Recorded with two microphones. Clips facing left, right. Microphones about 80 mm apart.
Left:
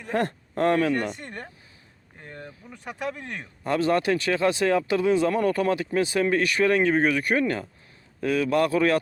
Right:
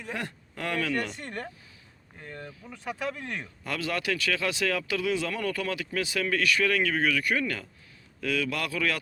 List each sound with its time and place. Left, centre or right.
0.0 s speech: left